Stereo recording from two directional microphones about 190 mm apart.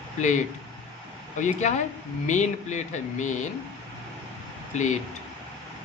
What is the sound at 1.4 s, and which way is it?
Speech, 40° left (ahead or behind).